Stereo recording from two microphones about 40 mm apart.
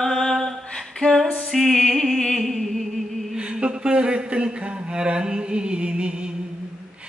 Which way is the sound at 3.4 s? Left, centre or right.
Right.